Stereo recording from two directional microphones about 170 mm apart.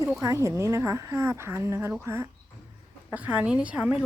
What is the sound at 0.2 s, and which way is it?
A woman's voice, 20° right (ahead or behind).